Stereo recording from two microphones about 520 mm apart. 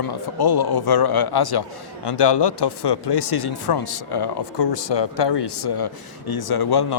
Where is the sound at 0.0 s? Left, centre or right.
Left.